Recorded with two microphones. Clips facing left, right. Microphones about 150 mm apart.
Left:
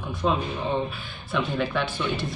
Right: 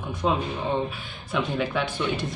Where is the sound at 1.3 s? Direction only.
15° right (ahead or behind).